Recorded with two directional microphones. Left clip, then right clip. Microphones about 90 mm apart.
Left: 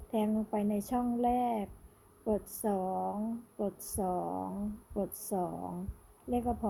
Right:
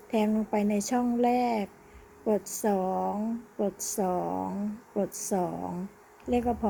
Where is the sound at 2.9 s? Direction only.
20° right (ahead or behind).